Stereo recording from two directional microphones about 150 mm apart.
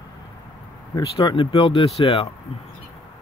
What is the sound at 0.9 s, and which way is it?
Speech, 25° left (ahead or behind).